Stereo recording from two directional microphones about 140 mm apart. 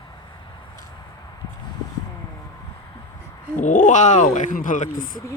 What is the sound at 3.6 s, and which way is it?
Speech, 65° left (ahead or behind).